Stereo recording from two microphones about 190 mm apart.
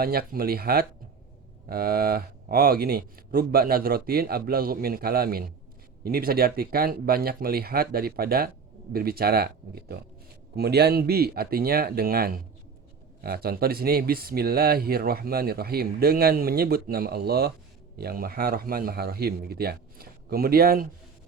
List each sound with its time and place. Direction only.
0.0 s speech: 55° right (ahead or behind)